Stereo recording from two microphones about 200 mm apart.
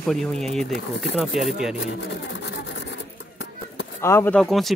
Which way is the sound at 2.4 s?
65° left (ahead or behind).